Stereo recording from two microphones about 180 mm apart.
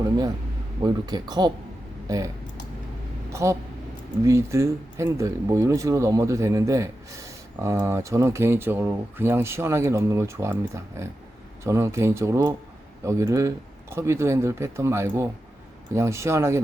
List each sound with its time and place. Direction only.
0.8 s speech: 25° right (ahead or behind)
3.3 s speech: 15° right (ahead or behind)